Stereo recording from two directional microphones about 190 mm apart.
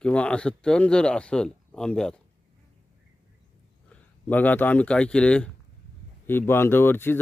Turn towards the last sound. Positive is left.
turn(degrees=10)  # may be behind; listen again after turning